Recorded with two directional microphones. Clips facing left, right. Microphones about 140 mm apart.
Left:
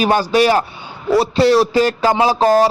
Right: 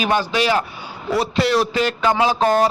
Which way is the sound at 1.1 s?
30° left (ahead or behind).